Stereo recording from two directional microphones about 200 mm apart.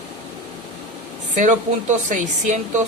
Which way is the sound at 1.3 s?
35° right (ahead or behind).